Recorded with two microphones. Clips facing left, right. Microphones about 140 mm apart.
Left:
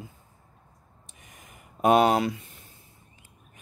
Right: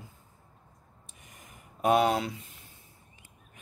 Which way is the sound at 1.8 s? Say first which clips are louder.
Left 4 dB; 90° left.